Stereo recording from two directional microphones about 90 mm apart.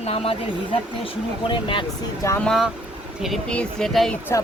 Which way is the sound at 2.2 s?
35° left (ahead or behind).